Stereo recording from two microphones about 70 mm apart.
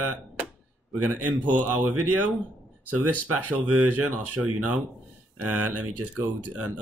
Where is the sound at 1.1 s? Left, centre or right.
Right.